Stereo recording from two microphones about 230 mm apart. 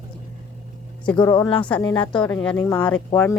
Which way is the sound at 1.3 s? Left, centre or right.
Centre.